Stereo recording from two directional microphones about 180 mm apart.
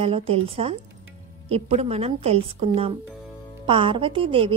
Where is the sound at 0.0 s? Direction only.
35° right (ahead or behind).